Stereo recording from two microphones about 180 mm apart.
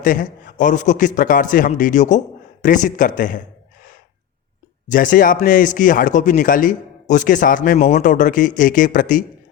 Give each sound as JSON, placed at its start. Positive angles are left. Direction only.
{"t": 0.0, "sound": "a man's voice", "side_deg": 50}
{"t": 4.9, "sound": "speech", "side_deg": 50}